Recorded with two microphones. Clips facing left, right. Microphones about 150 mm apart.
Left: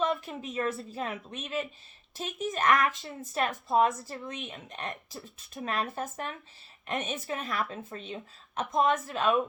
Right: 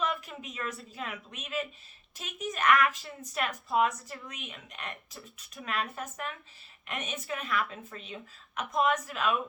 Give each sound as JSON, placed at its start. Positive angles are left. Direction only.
{"t": 0.0, "sound": "a woman's voice", "side_deg": 30}